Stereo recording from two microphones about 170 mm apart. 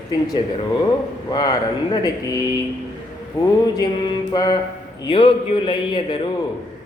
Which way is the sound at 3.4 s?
20° left (ahead or behind).